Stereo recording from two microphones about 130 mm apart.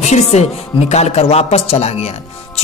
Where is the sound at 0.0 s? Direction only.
60° left (ahead or behind).